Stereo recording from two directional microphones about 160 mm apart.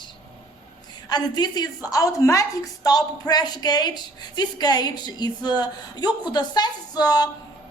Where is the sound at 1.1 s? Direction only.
25° left (ahead or behind).